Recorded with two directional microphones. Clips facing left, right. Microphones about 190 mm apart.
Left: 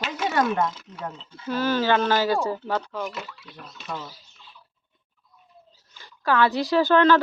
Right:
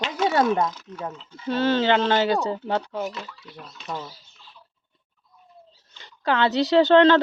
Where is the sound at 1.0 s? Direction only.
10° right (ahead or behind).